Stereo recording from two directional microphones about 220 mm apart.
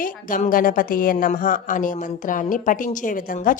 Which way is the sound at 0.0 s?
35° left (ahead or behind).